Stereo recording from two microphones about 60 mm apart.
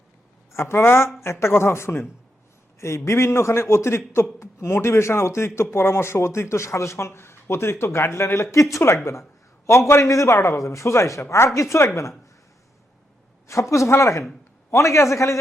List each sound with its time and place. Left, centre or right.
0.5 s speech: left
10.2 s speech: left
13.5 s speech: left